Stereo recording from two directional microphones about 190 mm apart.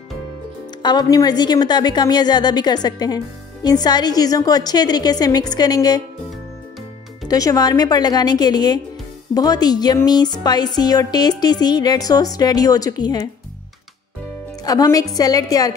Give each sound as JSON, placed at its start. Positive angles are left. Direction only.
{"t": 0.8, "sound": "speech", "side_deg": 20}
{"t": 7.2, "sound": "speech", "side_deg": 20}
{"t": 14.6, "sound": "speech", "side_deg": 20}